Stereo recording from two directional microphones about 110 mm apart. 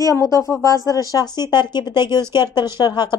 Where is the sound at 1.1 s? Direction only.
40° left (ahead or behind).